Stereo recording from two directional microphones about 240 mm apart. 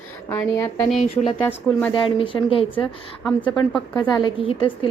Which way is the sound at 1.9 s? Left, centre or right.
Left.